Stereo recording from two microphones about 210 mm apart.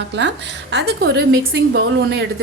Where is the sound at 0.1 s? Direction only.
55° right (ahead or behind).